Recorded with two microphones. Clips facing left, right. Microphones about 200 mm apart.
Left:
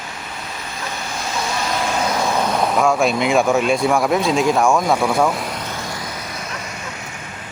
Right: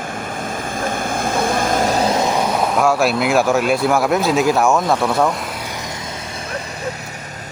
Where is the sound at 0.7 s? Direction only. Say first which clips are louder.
Right 7 dB; 50° right (ahead or behind); by 2.3 s 25° right (ahead or behind).